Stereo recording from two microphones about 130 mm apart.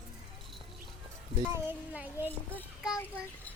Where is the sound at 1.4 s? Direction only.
15° right (ahead or behind).